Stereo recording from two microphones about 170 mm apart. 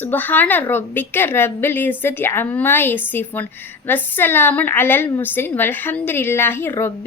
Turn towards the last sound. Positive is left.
turn(degrees=15)  # may be behind; listen again after turning